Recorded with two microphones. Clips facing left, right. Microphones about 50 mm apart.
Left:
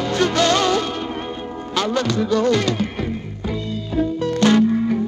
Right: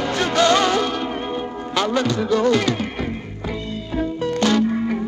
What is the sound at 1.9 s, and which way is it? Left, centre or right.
Music, centre.